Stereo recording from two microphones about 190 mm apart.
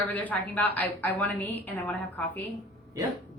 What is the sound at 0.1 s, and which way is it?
A woman's voice, 10° left (ahead or behind).